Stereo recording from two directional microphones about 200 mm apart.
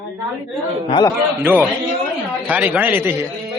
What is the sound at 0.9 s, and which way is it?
Speech, 20° left (ahead or behind).